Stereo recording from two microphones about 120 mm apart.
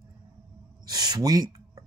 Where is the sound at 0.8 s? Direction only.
35° right (ahead or behind).